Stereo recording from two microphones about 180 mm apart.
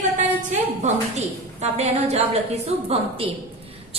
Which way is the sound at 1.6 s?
35° right (ahead or behind).